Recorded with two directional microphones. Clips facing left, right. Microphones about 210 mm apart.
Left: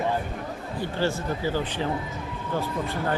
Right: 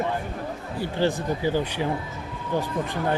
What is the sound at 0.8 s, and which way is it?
A man's voice, 15° right (ahead or behind).